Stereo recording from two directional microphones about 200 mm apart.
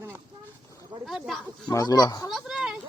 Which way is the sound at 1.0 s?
Centre (ahead or behind).